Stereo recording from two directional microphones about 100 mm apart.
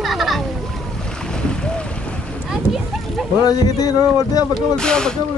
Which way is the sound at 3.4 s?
40° left (ahead or behind).